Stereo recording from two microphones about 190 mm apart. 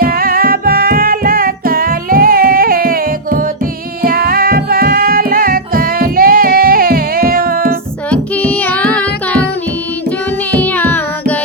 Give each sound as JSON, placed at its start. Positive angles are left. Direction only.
{"t": 0.0, "sound": "music", "side_deg": -50}
{"t": 8.1, "sound": "music", "side_deg": 10}
{"t": 10.5, "sound": "music", "side_deg": 10}